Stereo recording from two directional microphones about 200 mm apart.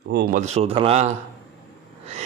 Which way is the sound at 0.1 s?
45° right (ahead or behind).